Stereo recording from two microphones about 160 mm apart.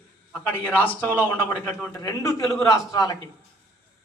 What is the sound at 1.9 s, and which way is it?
A man's voice, 20° left (ahead or behind).